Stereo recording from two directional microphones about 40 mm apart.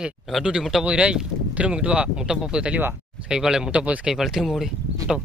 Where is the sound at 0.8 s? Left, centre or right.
Right.